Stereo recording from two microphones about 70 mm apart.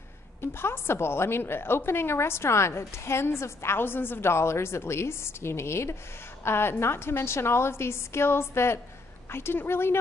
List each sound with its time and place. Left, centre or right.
0.4 s a woman's voice: left